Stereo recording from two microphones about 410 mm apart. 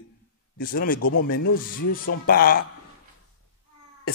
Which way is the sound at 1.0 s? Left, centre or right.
Left.